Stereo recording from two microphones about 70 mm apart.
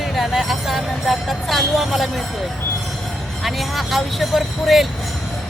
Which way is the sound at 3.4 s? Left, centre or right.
Centre.